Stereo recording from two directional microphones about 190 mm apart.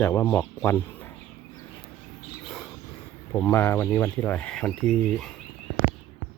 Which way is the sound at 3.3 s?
10° left (ahead or behind).